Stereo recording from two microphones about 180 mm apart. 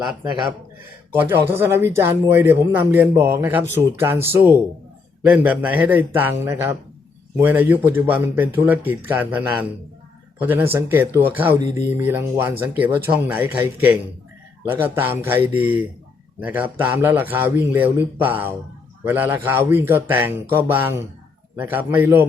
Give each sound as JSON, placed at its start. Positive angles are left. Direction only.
{"t": 1.1, "sound": "speech", "side_deg": -10}